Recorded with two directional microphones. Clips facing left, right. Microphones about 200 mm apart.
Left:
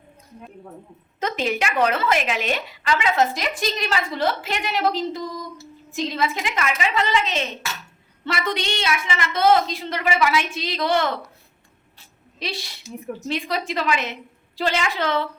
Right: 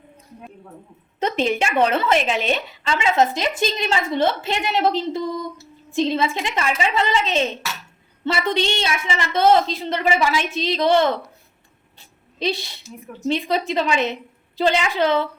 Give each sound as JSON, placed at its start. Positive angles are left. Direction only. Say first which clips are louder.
{"t": 1.5, "sound": "a woman's voice", "louder": "right 2 dB", "side_deg": -25}
{"t": 12.4, "sound": "a woman's voice", "louder": "right 7 dB", "side_deg": -25}